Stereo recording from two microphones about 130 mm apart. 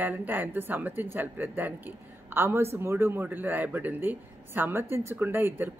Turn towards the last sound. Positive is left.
turn(degrees=-15)  # may be behind; listen again after turning